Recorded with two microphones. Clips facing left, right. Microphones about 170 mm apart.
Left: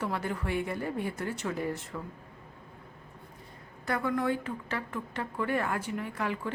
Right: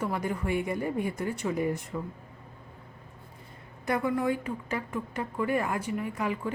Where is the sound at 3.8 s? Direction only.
15° right (ahead or behind).